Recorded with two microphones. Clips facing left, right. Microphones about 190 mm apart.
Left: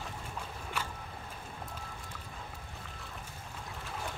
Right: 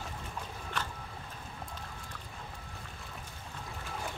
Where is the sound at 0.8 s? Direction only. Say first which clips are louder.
Right 1 dB; 10° left (ahead or behind).